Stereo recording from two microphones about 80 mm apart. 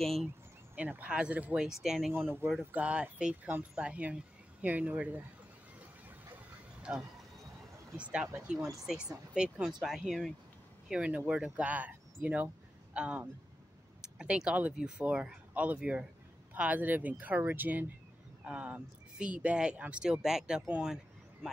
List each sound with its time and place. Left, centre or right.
0.0 s speech: centre
0.7 s speech: centre
1.7 s speech: centre
2.6 s speech: centre
5.8 s a sound: right
6.9 s speech: centre
8.5 s speech: right
8.8 s speech: centre
10.9 s speech: centre